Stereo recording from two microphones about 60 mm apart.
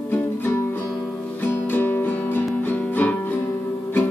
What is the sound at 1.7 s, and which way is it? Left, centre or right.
Music, left.